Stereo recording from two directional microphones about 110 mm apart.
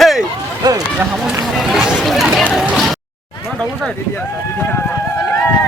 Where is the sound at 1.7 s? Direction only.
5° right (ahead or behind).